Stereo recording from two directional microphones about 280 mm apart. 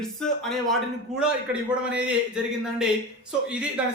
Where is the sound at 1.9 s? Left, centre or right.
Centre.